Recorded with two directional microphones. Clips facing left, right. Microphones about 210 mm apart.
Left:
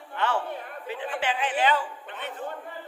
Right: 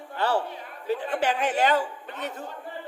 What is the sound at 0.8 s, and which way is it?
A man's voice, 40° right (ahead or behind).